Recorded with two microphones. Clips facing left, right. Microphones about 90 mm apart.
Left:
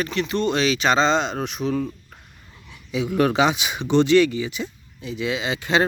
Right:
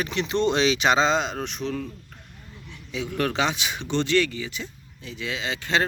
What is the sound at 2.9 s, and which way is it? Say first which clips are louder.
Speech: left 6 dB; 10° left (ahead or behind).